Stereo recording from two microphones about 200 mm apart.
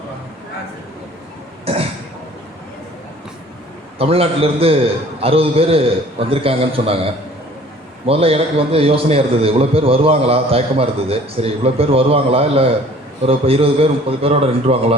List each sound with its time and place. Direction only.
1.6 s cough: 30° right (ahead or behind)
3.9 s a man's voice: 30° right (ahead or behind)